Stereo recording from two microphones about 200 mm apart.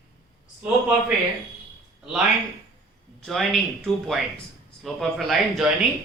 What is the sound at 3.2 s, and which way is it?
Speech, centre (ahead or behind).